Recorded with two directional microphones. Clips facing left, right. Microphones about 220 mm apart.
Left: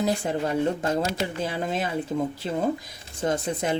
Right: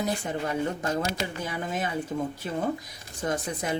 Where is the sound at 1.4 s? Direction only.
30° left (ahead or behind).